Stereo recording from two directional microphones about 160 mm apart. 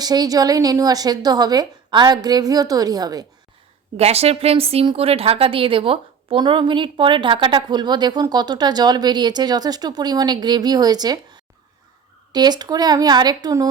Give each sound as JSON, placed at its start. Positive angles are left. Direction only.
{"t": 0.0, "sound": "a woman's voice", "side_deg": -25}
{"t": 3.9, "sound": "a woman's voice", "side_deg": -40}